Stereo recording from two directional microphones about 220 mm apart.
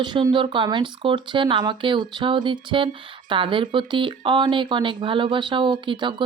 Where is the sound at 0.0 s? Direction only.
20° right (ahead or behind).